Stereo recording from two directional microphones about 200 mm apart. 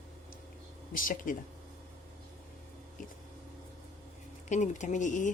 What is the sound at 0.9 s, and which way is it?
Speech, 40° left (ahead or behind).